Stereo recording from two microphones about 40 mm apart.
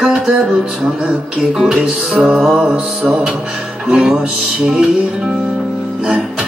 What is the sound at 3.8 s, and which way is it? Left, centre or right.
Music, right.